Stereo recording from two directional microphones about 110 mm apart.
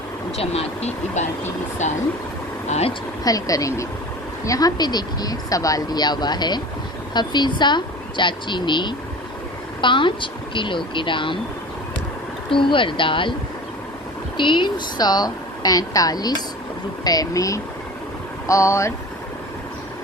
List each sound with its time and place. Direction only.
0.3 s speech: 70° left (ahead or behind)
2.6 s speech: 90° left
3.2 s a woman's voice: 30° left (ahead or behind); by 11.3 s 50° left (ahead or behind)
12.5 s a woman's voice: 50° left (ahead or behind)
14.3 s speech: 45° left (ahead or behind); by 18.9 s 25° left (ahead or behind)